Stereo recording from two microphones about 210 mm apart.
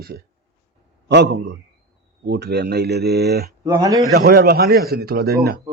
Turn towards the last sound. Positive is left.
turn(degrees=-50)  # may be behind; listen again after turning